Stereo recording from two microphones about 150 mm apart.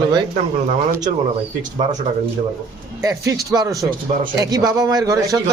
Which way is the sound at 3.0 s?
20° right (ahead or behind).